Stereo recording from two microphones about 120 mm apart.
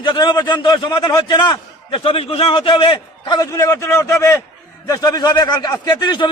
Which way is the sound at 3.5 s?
25° left (ahead or behind).